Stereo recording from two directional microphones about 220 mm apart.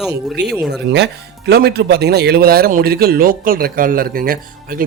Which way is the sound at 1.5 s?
45° right (ahead or behind).